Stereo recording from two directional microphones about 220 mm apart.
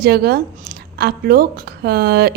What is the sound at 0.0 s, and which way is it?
A woman's voice, 45° right (ahead or behind).